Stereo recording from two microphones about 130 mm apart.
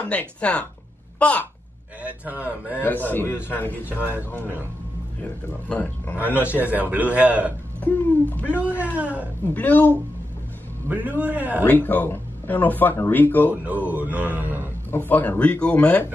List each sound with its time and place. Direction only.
0.0 s speech: 10° left (ahead or behind)
2.0 s mantra: 10° right (ahead or behind)
2.8 s speech: 15° left (ahead or behind)
5.7 s speech: 15° left (ahead or behind)
6.6 s mantra: 10° right (ahead or behind)
7.8 s speech: 15° left (ahead or behind)
8.9 s mantra: 10° right (ahead or behind)
9.5 s speech: 15° left (ahead or behind)
10.9 s mantra: 10° right (ahead or behind)
11.6 s speech: 15° left (ahead or behind)
13.7 s mantra: 10° right (ahead or behind)
14.9 s speech: 15° left (ahead or behind)